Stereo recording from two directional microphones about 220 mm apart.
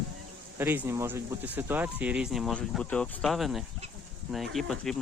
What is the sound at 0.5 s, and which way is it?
Speech, 10° right (ahead or behind).